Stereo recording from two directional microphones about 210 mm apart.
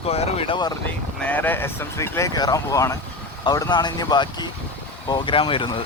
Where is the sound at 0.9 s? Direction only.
10° left (ahead or behind); by 5.8 s 25° left (ahead or behind).